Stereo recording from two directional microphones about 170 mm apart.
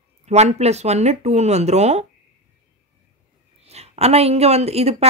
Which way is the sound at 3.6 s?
40° right (ahead or behind).